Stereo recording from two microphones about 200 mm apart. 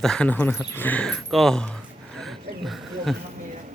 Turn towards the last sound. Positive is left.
turn(degrees=0)  # may be behind; listen again after turning